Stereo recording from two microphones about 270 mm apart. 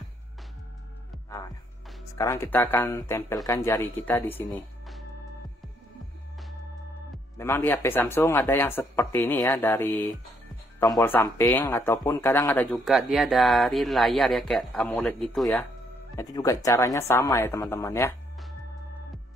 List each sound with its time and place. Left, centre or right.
2.1 s speech: centre
7.3 s speech: centre